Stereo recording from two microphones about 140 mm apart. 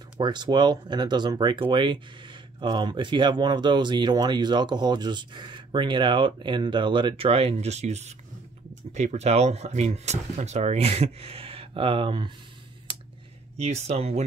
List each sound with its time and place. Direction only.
0.2 s speech: 30° right (ahead or behind)
13.6 s speech: 50° right (ahead or behind)